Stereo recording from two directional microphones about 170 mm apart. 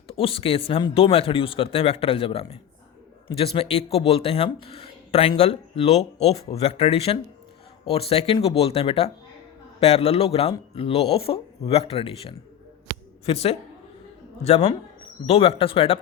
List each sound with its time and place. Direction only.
0.1 s speech: 35° left (ahead or behind)